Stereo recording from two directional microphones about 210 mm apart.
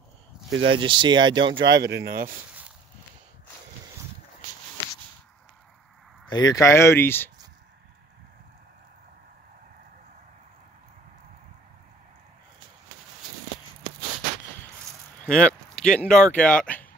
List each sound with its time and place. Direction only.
0.5 s speech: 65° right (ahead or behind)
0.7 s speech: 25° right (ahead or behind)
1.6 s speech: 55° right (ahead or behind)
6.2 s speech: 20° left (ahead or behind)
15.3 s speech: 5° left (ahead or behind)